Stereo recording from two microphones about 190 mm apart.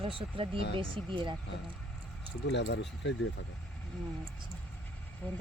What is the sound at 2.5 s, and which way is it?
Speech, 65° left (ahead or behind).